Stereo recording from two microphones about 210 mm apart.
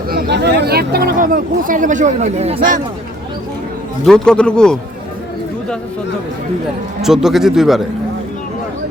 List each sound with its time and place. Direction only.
0.1 s speech: 50° right (ahead or behind)
4.0 s speech: 5° left (ahead or behind)
7.0 s speech: centre (ahead or behind)